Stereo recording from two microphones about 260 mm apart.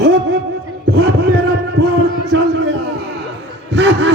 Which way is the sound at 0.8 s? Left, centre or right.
Right.